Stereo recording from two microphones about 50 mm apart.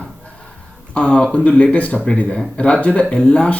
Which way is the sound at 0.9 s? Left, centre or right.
Left.